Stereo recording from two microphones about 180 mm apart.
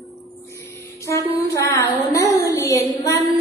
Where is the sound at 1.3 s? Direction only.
20° left (ahead or behind).